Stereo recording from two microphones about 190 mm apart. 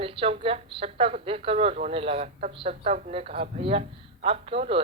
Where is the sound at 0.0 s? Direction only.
30° right (ahead or behind).